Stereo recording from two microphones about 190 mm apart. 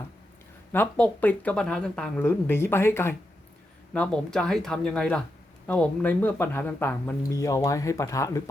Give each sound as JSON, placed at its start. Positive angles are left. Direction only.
{"t": 0.7, "sound": "speech", "side_deg": 10}